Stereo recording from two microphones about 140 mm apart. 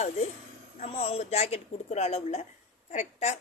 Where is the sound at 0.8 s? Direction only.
45° left (ahead or behind).